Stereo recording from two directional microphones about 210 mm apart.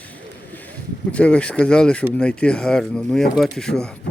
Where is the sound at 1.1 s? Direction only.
5° left (ahead or behind).